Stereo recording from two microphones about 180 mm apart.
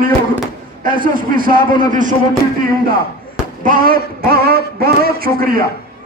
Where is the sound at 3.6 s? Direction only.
50° right (ahead or behind).